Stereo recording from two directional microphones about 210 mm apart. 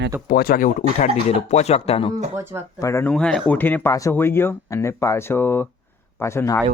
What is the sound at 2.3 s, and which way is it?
Speech, 10° right (ahead or behind).